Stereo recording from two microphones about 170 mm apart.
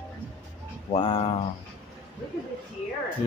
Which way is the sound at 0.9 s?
30° left (ahead or behind).